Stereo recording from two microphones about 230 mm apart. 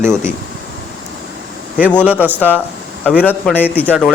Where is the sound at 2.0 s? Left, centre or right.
Centre.